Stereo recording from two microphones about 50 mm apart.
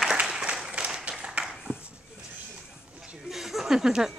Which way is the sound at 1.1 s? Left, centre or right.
Right.